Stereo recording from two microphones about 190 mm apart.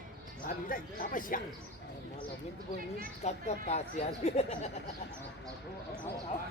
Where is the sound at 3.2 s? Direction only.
35° left (ahead or behind).